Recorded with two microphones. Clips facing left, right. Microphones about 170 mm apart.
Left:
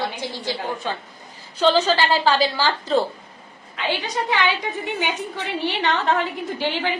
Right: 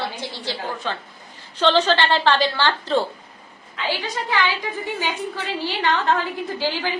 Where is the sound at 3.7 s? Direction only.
20° left (ahead or behind).